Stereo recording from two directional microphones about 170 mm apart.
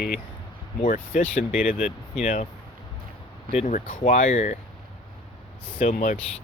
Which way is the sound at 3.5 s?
40° left (ahead or behind).